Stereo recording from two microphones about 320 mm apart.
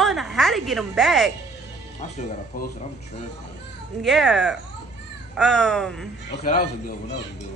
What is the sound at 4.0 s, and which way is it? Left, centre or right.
Speech, centre.